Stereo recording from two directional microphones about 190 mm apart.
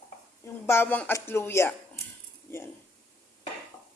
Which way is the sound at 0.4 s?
10° left (ahead or behind).